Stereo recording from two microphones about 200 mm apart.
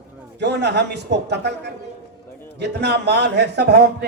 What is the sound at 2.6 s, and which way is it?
A man's voice, 55° right (ahead or behind).